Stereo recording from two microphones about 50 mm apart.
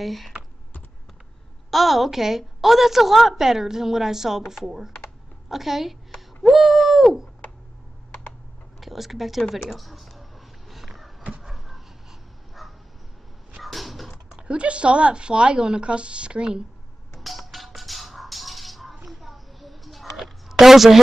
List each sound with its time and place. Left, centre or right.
0.0 s a woman's voice: centre
1.7 s a woman's voice: centre
5.5 s owl: centre
8.3 s computer keyboard: centre
9.8 s speech: centre
10.7 s a sound: centre
11.4 s dog: centre
13.6 s a sound: centre
14.3 s speech: right
17.2 s music: centre
19.0 s a sound: centre